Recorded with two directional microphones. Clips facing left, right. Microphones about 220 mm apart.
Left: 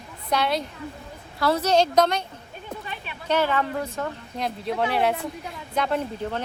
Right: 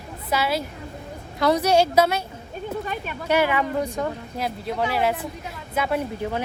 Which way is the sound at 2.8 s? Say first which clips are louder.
Right 7 dB; 45° right (ahead or behind).